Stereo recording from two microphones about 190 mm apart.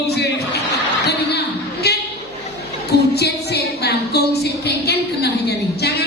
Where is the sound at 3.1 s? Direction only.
60° left (ahead or behind).